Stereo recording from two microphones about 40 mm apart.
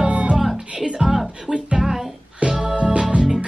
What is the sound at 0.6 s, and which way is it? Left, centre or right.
Music, right.